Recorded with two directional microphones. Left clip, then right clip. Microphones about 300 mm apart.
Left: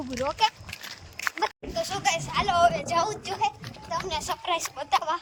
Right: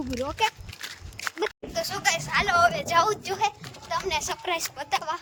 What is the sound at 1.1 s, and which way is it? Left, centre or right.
Walk, centre.